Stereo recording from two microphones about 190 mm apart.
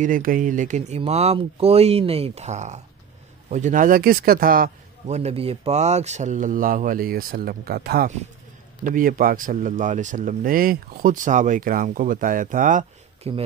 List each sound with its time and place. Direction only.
0.0 s speech: 45° right (ahead or behind)
5.0 s speech: 35° right (ahead or behind)